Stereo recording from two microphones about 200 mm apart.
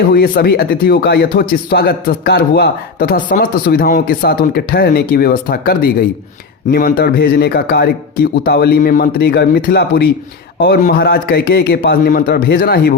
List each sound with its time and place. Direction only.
0.1 s speech: 50° left (ahead or behind)